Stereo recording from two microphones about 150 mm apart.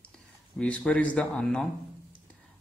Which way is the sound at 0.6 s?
10° left (ahead or behind).